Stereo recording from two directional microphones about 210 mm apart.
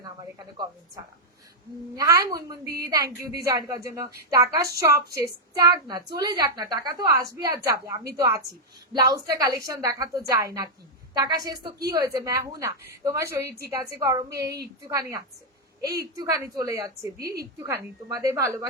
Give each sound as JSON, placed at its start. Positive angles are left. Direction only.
{"t": 1.0, "sound": "a woman's voice", "side_deg": -15}